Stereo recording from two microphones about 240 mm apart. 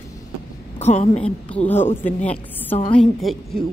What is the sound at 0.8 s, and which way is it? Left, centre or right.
Speech, left.